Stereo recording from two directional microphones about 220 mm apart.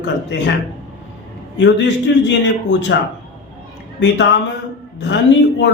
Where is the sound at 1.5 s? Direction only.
55° left (ahead or behind).